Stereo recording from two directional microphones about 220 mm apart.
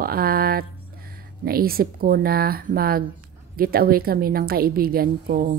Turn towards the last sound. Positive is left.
turn(degrees=-40)  # may be behind; listen again after turning